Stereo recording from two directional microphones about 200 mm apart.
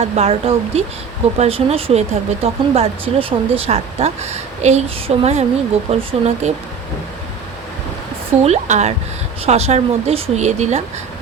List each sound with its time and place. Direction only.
0.0 s speech: 30° right (ahead or behind)
8.4 s speech: 35° right (ahead or behind)